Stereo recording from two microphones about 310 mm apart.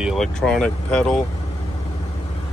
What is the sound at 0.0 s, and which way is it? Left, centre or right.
Speech, centre.